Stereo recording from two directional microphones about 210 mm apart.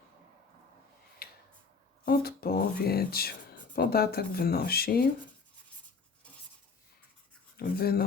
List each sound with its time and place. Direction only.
1.2 s a sound: 45° left (ahead or behind)
2.0 s speech: 45° left (ahead or behind)
7.5 s speech: 45° left (ahead or behind)